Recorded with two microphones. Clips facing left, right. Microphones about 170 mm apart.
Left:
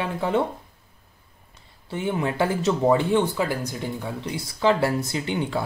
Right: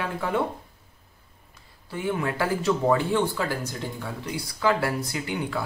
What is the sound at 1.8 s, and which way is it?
Speech, 20° left (ahead or behind).